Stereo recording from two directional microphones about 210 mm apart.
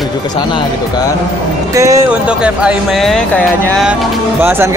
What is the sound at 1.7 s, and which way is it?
Speech, 15° right (ahead or behind).